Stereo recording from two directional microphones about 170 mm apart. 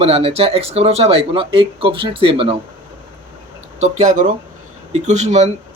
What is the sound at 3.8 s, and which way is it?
Speech, 45° right (ahead or behind).